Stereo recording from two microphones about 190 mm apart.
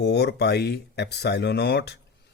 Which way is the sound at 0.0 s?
60° left (ahead or behind).